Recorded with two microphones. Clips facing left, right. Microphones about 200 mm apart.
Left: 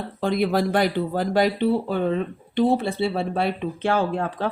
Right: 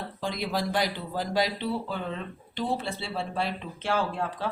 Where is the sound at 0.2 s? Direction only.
55° left (ahead or behind).